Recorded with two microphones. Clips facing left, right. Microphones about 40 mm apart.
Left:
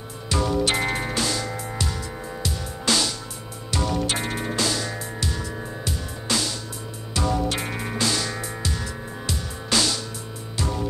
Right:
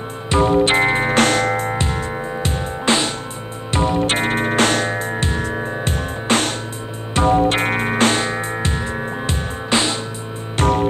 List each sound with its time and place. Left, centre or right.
0.3 s music: right
1.1 s music: right
1.8 s music: right
10.6 s music: right